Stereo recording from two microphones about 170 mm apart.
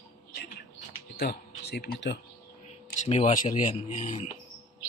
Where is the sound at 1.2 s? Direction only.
70° left (ahead or behind).